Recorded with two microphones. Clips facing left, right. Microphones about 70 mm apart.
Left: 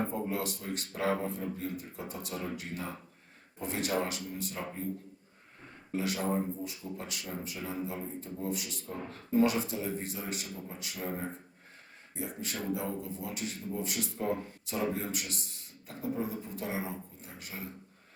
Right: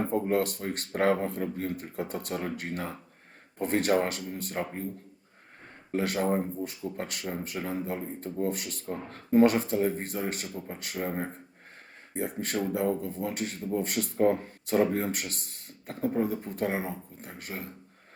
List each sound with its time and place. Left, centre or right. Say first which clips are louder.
0.1 s a man's voice: right 7 dB; right
5.9 s a man's voice: right 5 dB; right
12.7 s a man's voice: right 7 dB; right